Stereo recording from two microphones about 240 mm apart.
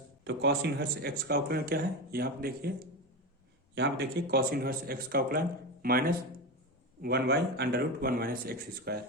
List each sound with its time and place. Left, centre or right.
0.3 s speech: right